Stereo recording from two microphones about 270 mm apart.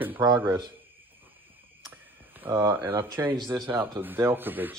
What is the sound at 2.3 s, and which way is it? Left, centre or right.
Speech, centre.